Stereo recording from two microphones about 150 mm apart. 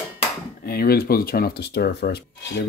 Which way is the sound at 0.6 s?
90° left.